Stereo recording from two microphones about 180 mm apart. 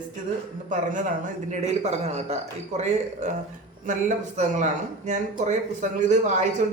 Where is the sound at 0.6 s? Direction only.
45° right (ahead or behind).